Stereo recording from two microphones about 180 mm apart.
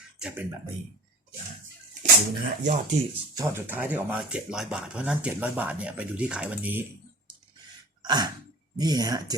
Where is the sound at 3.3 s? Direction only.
15° right (ahead or behind).